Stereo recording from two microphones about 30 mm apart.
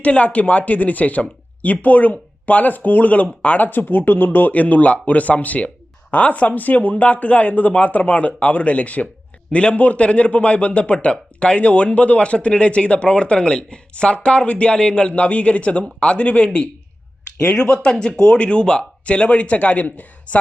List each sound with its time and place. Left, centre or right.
0.1 s speech: left
6.9 s a man's voice: left
9.5 s speech: left
9.7 s speech: left
10.0 s speech: left
14.8 s a man's voice: left
18.0 s speech: left
18.8 s a man's voice: left